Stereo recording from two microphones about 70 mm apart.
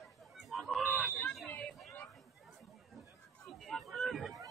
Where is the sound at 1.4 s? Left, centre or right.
Left.